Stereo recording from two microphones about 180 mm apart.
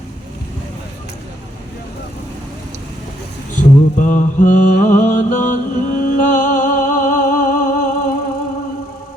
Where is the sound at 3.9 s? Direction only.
45° left (ahead or behind).